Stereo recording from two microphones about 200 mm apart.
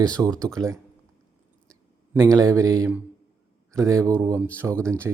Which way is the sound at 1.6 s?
15° right (ahead or behind).